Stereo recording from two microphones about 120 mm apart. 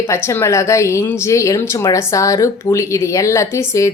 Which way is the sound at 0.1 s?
20° left (ahead or behind).